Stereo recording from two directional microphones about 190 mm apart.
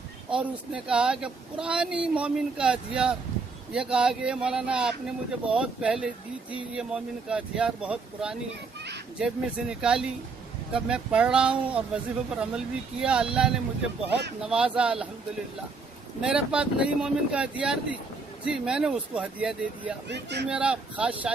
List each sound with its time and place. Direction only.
0.3 s speech: 5° right (ahead or behind)
16.2 s speech: 5° right (ahead or behind)
20.1 s speech: 65° right (ahead or behind)
20.4 s speech: 5° right (ahead or behind)